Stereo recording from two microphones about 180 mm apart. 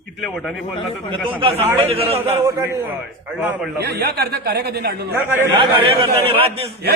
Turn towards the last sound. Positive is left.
turn(degrees=-30)  # may be behind; listen again after turning